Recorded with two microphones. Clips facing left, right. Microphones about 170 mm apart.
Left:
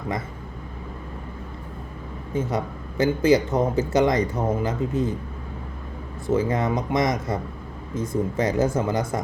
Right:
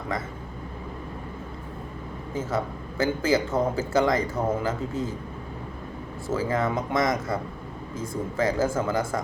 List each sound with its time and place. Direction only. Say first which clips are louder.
3.0 s speech: left 5 dB; 20° left (ahead or behind)
6.2 s speech: left 3 dB; 20° left (ahead or behind)